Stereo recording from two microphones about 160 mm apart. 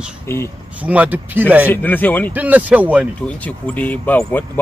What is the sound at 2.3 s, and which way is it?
Speech, 10° right (ahead or behind).